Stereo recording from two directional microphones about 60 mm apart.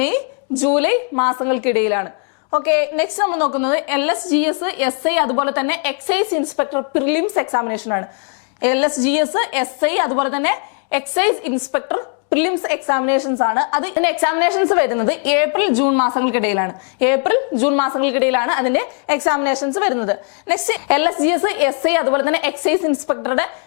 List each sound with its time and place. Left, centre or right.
0.6 s a woman's voice: centre